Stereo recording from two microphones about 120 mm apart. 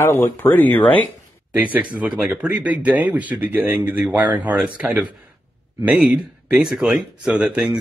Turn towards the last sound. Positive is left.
turn(degrees=-10)  # may be behind; listen again after turning